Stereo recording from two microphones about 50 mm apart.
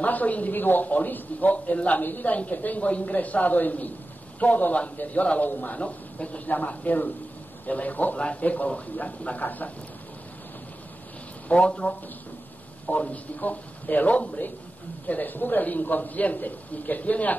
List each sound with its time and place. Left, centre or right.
0.0 s a man's voice: left
11.4 s speech: left
12.9 s a man's voice: left